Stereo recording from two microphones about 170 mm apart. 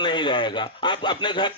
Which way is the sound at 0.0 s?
30° left (ahead or behind).